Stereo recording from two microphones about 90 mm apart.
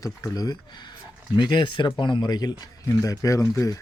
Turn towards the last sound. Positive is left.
turn(degrees=35)  # may be behind; listen again after turning